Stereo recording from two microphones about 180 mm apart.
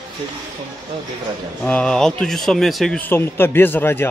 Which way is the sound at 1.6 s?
5° left (ahead or behind).